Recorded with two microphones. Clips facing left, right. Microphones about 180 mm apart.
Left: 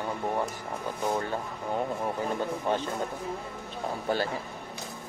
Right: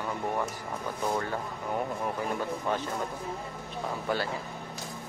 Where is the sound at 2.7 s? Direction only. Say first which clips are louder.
Left 3 dB; 30° left (ahead or behind).